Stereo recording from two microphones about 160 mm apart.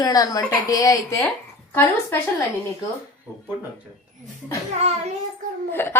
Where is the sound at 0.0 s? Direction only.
25° left (ahead or behind).